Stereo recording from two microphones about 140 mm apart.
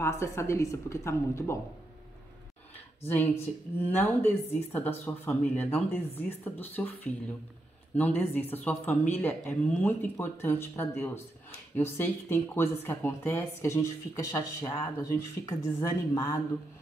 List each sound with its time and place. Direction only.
0.0 s speech: 20° left (ahead or behind)
3.0 s speech: 15° left (ahead or behind)
7.9 s speech: 15° left (ahead or behind)